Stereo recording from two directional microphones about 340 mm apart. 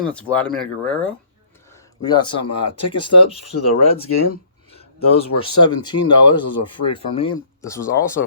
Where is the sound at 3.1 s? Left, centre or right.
Left.